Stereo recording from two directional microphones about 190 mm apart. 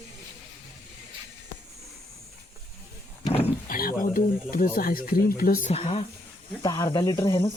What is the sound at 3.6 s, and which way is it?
Speech, 50° left (ahead or behind).